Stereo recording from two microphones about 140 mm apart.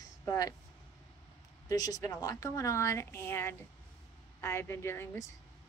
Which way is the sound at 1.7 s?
25° left (ahead or behind).